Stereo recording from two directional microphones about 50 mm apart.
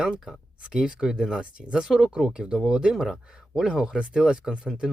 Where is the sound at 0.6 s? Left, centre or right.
Centre.